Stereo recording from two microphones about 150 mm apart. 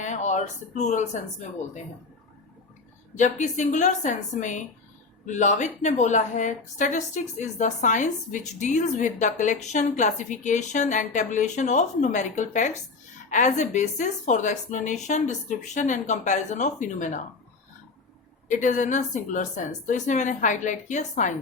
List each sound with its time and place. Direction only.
0.0 s speech: 55° left (ahead or behind)
3.2 s a woman's voice: 55° left (ahead or behind)
18.4 s a woman's voice: 55° left (ahead or behind)